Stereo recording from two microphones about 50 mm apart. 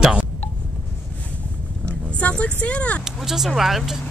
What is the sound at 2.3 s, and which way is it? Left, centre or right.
Speech, left.